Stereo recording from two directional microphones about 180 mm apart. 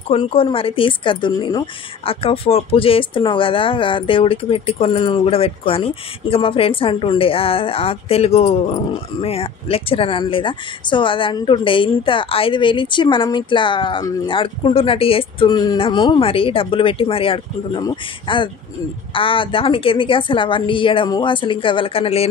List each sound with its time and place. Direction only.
0.1 s speech: 30° left (ahead or behind)